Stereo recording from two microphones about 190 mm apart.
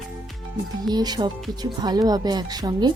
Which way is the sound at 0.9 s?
20° right (ahead or behind).